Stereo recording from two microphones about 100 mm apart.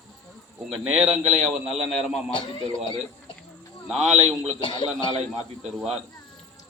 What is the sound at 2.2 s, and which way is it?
Speech, 60° left (ahead or behind).